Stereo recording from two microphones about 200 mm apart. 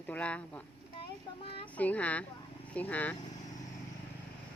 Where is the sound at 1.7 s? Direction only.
5° left (ahead or behind).